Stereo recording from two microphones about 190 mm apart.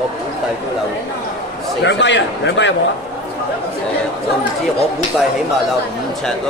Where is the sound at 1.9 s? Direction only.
70° left (ahead or behind).